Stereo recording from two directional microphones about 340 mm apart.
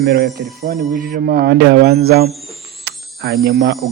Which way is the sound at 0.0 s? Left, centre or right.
Right.